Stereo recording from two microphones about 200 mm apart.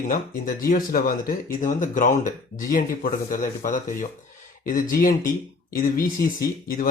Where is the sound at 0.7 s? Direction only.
45° left (ahead or behind).